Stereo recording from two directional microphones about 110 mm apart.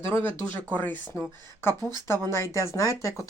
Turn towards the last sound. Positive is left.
turn(degrees=30)  # may be behind; listen again after turning